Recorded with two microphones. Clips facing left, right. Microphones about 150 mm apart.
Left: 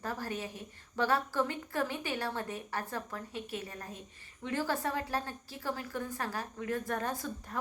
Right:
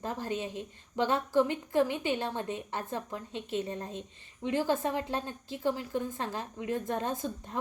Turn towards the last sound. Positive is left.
turn(degrees=-20)  # may be behind; listen again after turning